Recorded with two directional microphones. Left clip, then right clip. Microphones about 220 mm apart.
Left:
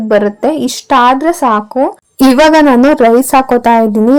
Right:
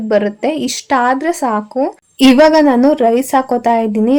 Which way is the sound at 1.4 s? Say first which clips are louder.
Left 6 dB; 15° left (ahead or behind).